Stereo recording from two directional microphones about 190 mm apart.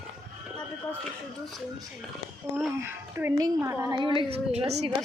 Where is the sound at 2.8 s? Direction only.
15° right (ahead or behind); by 4.9 s 35° right (ahead or behind).